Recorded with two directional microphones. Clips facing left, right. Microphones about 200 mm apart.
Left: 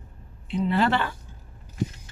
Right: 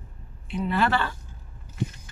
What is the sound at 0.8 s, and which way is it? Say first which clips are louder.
Speech: even; 20° left (ahead or behind).